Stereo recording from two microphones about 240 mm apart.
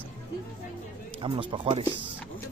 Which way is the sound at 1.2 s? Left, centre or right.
Right.